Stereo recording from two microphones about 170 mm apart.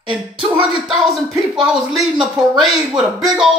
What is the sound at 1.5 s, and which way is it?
Speech, 5° right (ahead or behind).